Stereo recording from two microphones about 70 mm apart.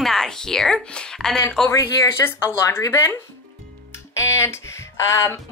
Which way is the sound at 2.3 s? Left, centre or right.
Left.